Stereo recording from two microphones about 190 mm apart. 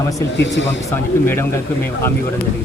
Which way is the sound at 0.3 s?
65° left (ahead or behind).